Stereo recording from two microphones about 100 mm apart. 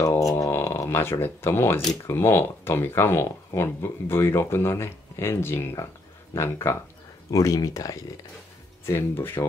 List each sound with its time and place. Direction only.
0.0 s a sound: 30° left (ahead or behind)
2.0 s speech: 25° left (ahead or behind)
8.8 s speech: 25° left (ahead or behind)